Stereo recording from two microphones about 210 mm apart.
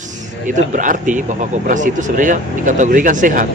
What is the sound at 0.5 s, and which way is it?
Speech, 40° right (ahead or behind).